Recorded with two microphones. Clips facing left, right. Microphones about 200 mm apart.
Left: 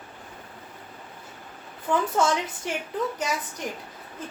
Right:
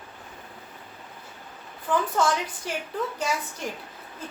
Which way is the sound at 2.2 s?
20° left (ahead or behind).